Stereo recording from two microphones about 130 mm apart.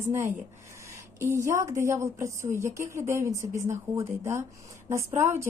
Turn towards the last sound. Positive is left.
turn(degrees=-20)  # may be behind; listen again after turning